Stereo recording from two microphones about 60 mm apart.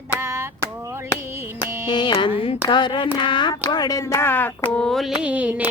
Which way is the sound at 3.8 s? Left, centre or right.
Left.